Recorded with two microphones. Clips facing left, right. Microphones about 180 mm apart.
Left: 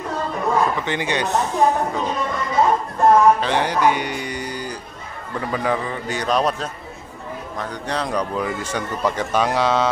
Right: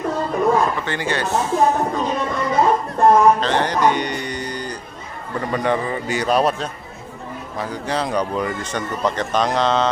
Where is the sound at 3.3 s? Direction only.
10° left (ahead or behind).